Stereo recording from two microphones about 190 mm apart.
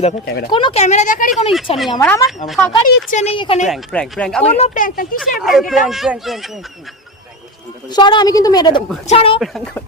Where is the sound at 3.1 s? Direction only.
35° left (ahead or behind).